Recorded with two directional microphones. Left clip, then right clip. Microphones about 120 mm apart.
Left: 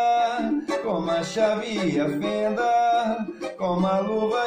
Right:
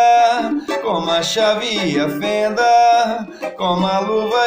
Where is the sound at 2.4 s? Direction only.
20° left (ahead or behind).